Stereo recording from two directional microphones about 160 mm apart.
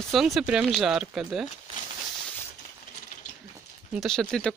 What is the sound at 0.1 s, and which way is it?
Speech, centre (ahead or behind).